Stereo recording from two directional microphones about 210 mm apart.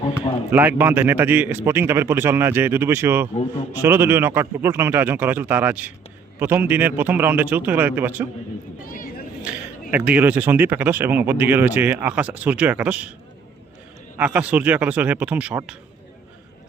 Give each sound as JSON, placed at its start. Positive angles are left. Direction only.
{"t": 0.0, "sound": "a sound", "side_deg": 25}
{"t": 0.5, "sound": "speech", "side_deg": -10}
{"t": 9.9, "sound": "speech", "side_deg": -10}
{"t": 14.2, "sound": "speech", "side_deg": -5}